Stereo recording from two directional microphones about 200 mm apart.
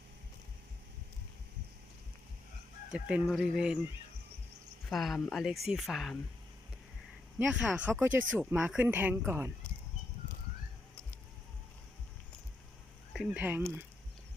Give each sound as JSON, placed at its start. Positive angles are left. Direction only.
{"t": 2.9, "sound": "speech", "side_deg": 0}
{"t": 4.9, "sound": "speech", "side_deg": 0}
{"t": 7.3, "sound": "speech", "side_deg": -5}
{"t": 13.1, "sound": "speech", "side_deg": -5}